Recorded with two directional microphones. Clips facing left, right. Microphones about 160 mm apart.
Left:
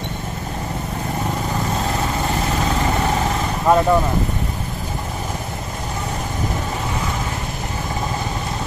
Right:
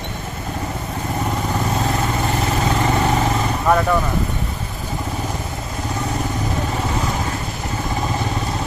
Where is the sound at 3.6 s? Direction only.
20° left (ahead or behind).